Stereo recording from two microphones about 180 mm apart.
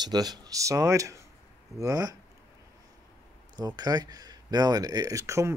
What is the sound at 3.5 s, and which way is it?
Speech, 20° right (ahead or behind).